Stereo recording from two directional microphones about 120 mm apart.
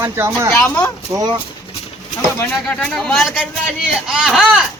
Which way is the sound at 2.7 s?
5° left (ahead or behind).